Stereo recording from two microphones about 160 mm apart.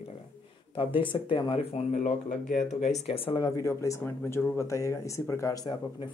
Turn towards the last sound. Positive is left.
turn(degrees=25)  # may be behind; listen again after turning